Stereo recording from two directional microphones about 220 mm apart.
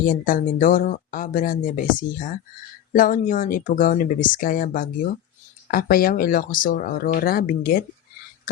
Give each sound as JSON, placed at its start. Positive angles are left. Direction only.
{"t": 0.0, "sound": "speech", "side_deg": 35}